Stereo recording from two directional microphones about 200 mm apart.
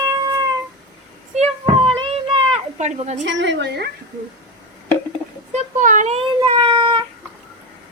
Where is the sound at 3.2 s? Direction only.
65° right (ahead or behind).